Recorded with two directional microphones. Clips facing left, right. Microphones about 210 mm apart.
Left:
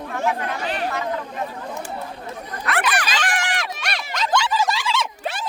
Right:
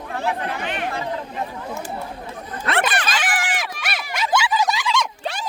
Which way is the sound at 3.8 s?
5° right (ahead or behind).